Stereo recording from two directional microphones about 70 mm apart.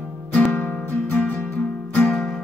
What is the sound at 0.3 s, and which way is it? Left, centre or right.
Music, left.